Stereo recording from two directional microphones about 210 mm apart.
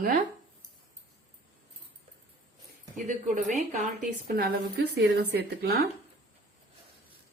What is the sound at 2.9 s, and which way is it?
A woman's voice, 40° right (ahead or behind).